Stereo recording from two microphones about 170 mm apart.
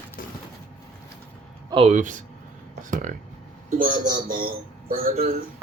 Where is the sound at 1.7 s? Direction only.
35° right (ahead or behind).